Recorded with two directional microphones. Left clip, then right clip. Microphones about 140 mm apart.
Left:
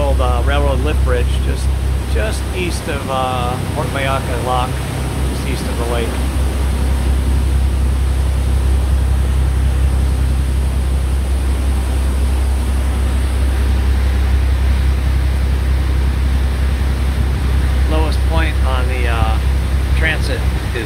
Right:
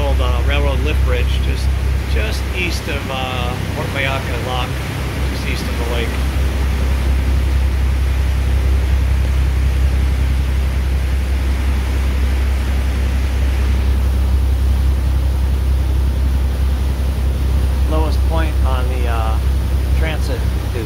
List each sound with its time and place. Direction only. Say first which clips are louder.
0.2 s vehicle: left 3 dB; 20° left (ahead or behind)
2.6 s speech: even; 20° left (ahead or behind)
17.9 s vehicle: left 1 dB; 5° left (ahead or behind)